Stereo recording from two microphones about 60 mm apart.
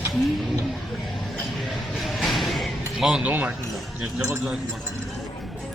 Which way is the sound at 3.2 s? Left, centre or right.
Right.